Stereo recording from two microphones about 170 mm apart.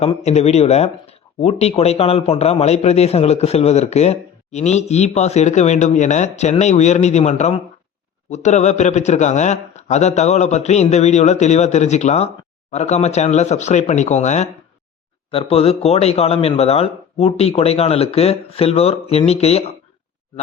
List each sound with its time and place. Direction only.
0.0 s a man's voice: 40° left (ahead or behind)